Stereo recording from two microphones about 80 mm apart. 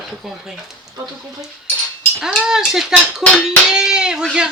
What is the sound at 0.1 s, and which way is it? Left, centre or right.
Speech, centre.